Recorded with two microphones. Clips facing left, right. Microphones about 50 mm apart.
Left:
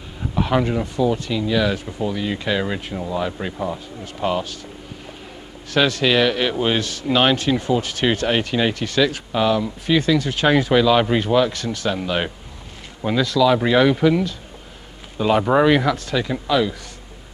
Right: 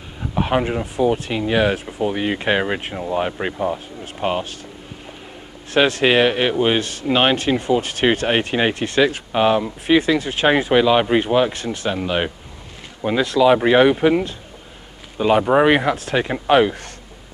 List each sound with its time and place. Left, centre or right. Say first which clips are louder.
0.3 s speech: even; right
1.0 s speech: right 3 dB; right
5.7 s speech: right 2 dB; right
15.1 s speech: right 2 dB; centre
15.5 s speech: right 1 dB; right